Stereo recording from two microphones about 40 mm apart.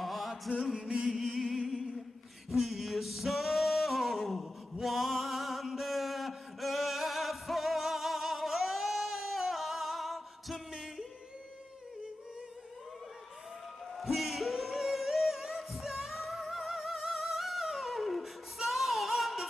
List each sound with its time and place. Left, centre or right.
0.0 s music: centre
0.7 s music: centre
1.0 s music: centre
2.5 s singing: centre
10.7 s music: centre
13.9 s music: centre